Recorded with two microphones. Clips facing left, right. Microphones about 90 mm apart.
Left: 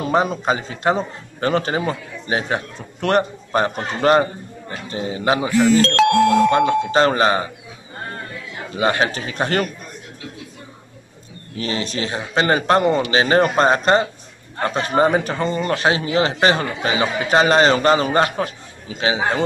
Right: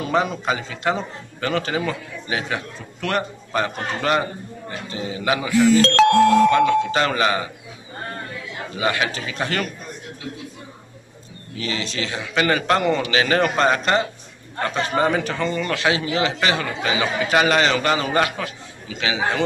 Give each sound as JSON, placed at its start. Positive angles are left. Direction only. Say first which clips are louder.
{"t": 0.0, "sound": "speech", "louder": "left 3 dB", "side_deg": 35}
{"t": 8.7, "sound": "speech", "louder": "left 4 dB", "side_deg": 35}
{"t": 11.5, "sound": "speech", "louder": "left 3 dB", "side_deg": 40}